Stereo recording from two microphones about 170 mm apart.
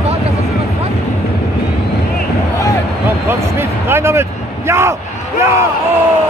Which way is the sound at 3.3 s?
15° right (ahead or behind).